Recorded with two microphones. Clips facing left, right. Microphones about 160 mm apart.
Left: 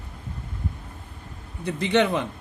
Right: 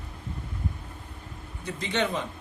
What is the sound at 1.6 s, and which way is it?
Speech, 60° left (ahead or behind).